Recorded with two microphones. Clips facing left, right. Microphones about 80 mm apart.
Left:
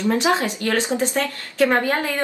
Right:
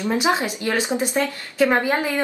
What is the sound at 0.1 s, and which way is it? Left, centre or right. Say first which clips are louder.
A woman's voice: even; centre.